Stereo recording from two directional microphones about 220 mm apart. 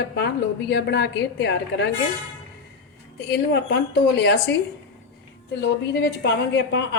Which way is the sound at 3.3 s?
50° left (ahead or behind).